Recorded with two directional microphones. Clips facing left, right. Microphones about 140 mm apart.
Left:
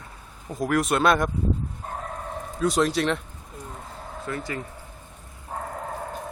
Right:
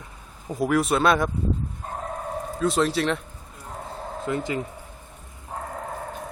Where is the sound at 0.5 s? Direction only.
5° right (ahead or behind).